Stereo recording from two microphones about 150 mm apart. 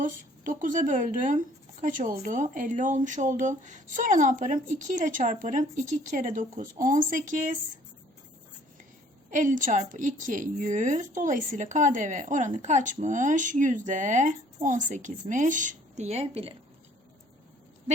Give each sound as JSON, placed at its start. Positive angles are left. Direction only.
{"t": 0.0, "sound": "a woman's voice", "side_deg": -60}
{"t": 9.3, "sound": "a woman's voice", "side_deg": -60}